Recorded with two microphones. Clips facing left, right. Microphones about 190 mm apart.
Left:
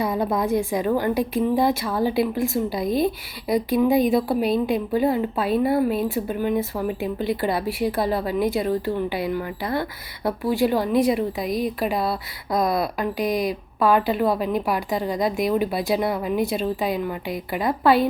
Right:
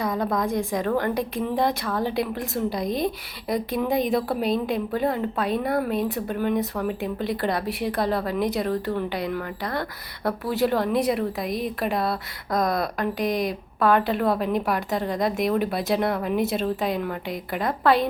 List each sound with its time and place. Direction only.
0.2 s a woman's voice: 5° left (ahead or behind)